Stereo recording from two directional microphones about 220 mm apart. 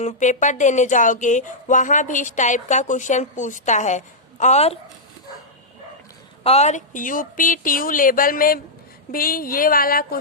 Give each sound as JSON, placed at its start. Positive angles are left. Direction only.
{"t": 0.0, "sound": "speech", "side_deg": 30}
{"t": 6.4, "sound": "speech", "side_deg": 30}